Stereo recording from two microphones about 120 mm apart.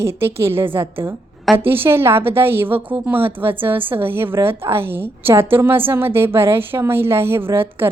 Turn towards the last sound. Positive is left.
turn(degrees=-20)  # may be behind; listen again after turning